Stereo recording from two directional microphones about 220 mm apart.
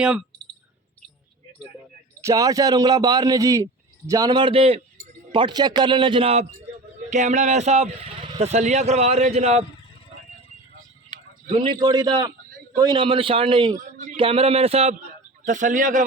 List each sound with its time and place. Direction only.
0.0 s speech: 5° right (ahead or behind)
2.2 s a man's voice: 15° right (ahead or behind)
11.8 s speech: 20° right (ahead or behind)
13.7 s a sound: 35° right (ahead or behind)
14.2 s speech: 25° right (ahead or behind)